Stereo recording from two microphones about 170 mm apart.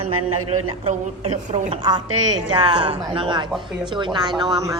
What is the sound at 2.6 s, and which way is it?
A woman's voice, 25° right (ahead or behind).